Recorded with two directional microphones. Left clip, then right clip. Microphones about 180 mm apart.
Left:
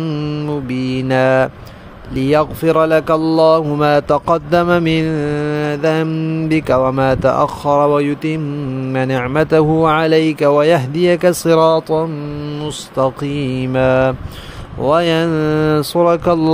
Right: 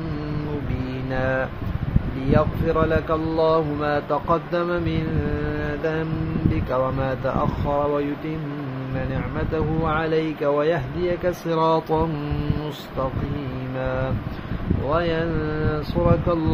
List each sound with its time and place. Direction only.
0.8 s mantra: 60° left (ahead or behind)
2.2 s speech: 60° left (ahead or behind)
8.9 s speech: 75° left (ahead or behind); by 11.7 s 55° left (ahead or behind)
11.7 s mantra: 25° left (ahead or behind)
13.7 s speech: 65° left (ahead or behind)
14.9 s speech: 80° left